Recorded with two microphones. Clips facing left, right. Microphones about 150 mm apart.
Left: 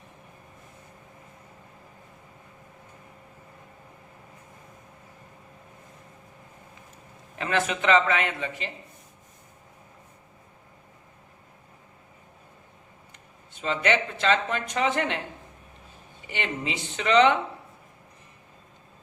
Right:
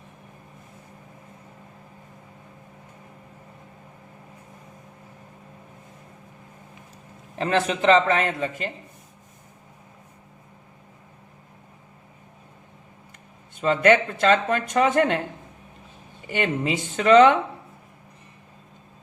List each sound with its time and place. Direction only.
7.3 s a man's voice: 35° right (ahead or behind)
13.6 s speech: 50° right (ahead or behind)
16.3 s speech: 45° right (ahead or behind)